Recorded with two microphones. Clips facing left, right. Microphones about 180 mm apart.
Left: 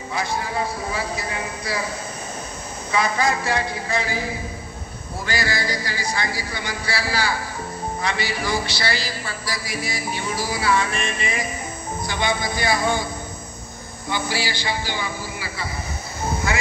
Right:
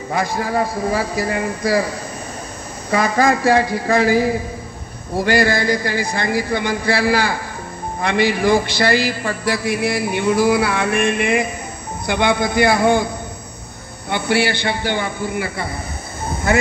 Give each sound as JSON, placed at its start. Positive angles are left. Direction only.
{"t": 0.4, "sound": "a man's voice", "side_deg": -45}
{"t": 2.9, "sound": "a man's voice", "side_deg": -45}
{"t": 5.1, "sound": "a man's voice", "side_deg": -60}